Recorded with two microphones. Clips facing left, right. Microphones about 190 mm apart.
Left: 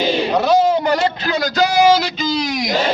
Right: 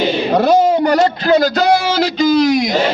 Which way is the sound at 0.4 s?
45° right (ahead or behind).